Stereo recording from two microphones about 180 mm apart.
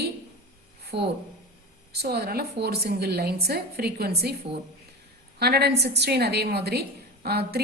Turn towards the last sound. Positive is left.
turn(degrees=-60)  # may be behind; listen again after turning